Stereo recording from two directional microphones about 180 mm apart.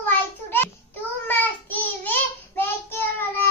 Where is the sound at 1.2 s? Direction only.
10° left (ahead or behind).